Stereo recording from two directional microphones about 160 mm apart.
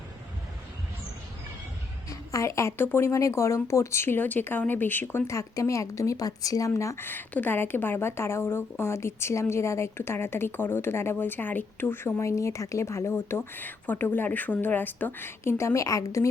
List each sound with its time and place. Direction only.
2.0 s a woman's voice: 20° left (ahead or behind)